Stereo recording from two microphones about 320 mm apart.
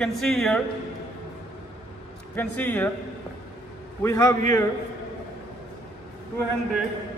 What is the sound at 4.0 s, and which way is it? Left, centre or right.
Speech, centre.